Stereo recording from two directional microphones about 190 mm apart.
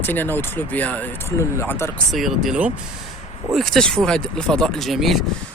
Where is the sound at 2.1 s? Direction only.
Centre (ahead or behind).